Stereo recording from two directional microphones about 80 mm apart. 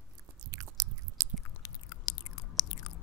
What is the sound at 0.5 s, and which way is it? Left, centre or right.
Chewing, right.